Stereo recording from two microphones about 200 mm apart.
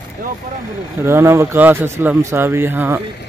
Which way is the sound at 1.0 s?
15° right (ahead or behind).